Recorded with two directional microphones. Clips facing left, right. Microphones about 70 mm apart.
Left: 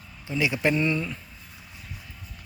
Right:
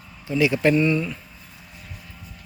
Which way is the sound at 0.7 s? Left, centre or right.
Left.